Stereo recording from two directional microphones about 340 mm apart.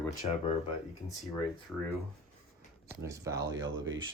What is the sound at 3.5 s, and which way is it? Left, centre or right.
Speech, right.